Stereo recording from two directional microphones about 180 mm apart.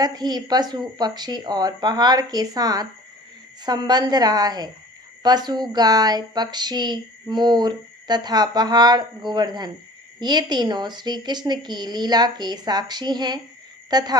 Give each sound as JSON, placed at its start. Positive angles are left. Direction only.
{"t": 0.0, "sound": "speech", "side_deg": -20}